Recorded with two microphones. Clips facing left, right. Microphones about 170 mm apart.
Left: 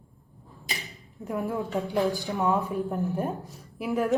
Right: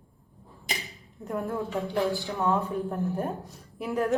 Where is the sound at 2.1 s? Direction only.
15° left (ahead or behind).